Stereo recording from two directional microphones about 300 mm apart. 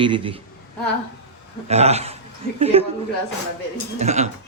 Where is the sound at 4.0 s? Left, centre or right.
Right.